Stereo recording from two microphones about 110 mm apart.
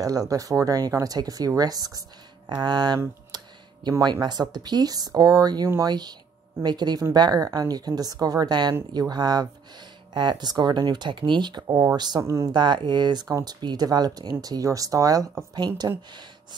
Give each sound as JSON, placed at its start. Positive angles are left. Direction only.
{"t": 0.0, "sound": "speech", "side_deg": -35}
{"t": 3.3, "sound": "a sound", "side_deg": -40}
{"t": 4.0, "sound": "speech", "side_deg": -40}